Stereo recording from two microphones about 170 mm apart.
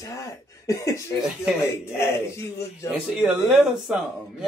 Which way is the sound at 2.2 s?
15° left (ahead or behind).